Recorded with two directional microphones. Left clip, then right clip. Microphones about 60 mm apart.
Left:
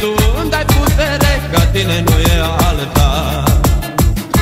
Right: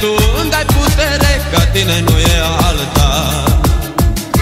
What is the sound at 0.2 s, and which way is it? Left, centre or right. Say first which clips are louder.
Music: right 2 dB; right.